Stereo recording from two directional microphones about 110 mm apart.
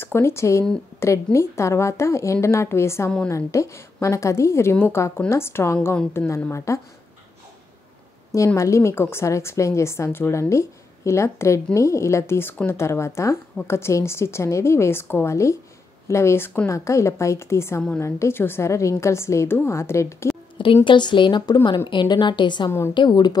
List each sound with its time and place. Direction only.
0.0 s a woman's voice: 25° left (ahead or behind)
8.5 s a woman's voice: 25° left (ahead or behind)
20.5 s a woman's voice: 50° left (ahead or behind)